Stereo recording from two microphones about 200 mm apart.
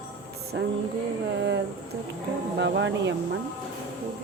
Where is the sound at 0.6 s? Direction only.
60° right (ahead or behind).